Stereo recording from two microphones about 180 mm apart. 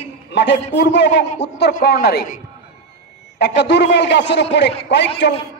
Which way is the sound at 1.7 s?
60° left (ahead or behind).